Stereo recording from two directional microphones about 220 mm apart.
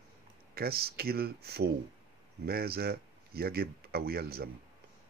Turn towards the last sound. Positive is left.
turn(degrees=-45)  # may be behind; listen again after turning